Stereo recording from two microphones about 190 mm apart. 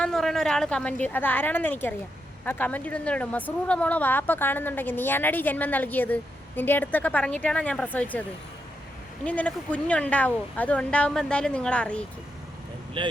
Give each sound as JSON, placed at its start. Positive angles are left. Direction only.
{"t": 0.0, "sound": "speech", "side_deg": 0}
{"t": 9.2, "sound": "speech", "side_deg": 5}
{"t": 13.0, "sound": "speech", "side_deg": -25}